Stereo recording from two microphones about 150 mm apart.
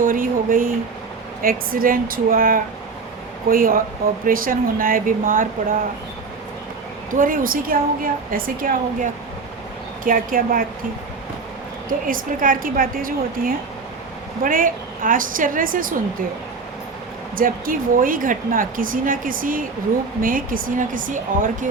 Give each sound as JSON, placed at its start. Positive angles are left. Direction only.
{"t": 0.0, "sound": "speech", "side_deg": -65}
{"t": 7.1, "sound": "speech", "side_deg": -65}
{"t": 11.9, "sound": "a woman's voice", "side_deg": -65}
{"t": 17.3, "sound": "a woman's voice", "side_deg": -70}